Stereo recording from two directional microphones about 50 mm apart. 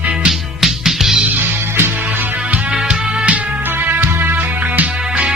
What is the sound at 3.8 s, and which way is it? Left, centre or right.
Music, right.